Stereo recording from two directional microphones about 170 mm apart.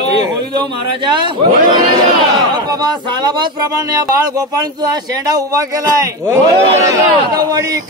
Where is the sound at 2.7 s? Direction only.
25° right (ahead or behind).